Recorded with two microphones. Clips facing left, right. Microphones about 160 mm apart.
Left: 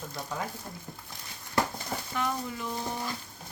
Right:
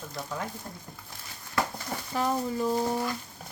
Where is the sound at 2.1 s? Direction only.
35° right (ahead or behind).